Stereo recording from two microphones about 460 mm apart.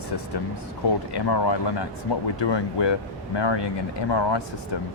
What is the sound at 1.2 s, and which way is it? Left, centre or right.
Speech, left.